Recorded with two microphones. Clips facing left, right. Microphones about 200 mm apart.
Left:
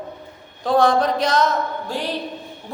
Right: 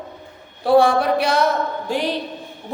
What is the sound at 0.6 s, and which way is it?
A woman's voice, 10° right (ahead or behind).